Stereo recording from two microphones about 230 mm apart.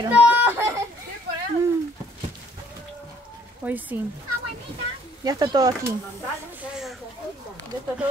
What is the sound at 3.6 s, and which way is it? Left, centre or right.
Speech, centre.